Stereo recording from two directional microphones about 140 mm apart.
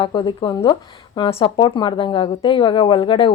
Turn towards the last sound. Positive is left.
turn(degrees=35)  # may be behind; listen again after turning